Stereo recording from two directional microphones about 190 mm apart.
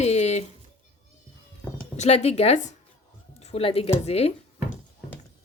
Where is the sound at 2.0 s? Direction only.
35° left (ahead or behind).